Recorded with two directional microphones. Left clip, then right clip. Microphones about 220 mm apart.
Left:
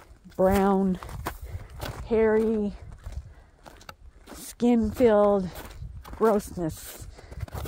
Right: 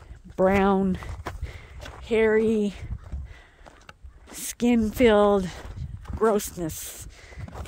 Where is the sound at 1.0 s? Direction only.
50° left (ahead or behind).